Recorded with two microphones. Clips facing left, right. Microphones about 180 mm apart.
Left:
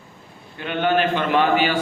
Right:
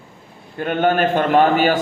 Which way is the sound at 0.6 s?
45° right (ahead or behind).